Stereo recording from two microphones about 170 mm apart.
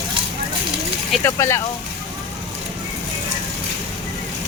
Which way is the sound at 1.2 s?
15° left (ahead or behind).